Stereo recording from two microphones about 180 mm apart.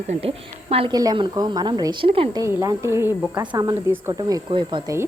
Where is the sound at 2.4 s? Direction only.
15° right (ahead or behind).